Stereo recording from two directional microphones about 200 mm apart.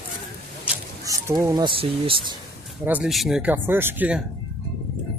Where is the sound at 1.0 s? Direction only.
15° right (ahead or behind).